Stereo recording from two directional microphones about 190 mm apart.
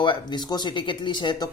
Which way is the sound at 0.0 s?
25° left (ahead or behind).